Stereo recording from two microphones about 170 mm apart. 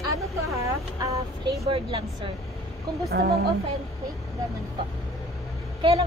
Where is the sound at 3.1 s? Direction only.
65° right (ahead or behind).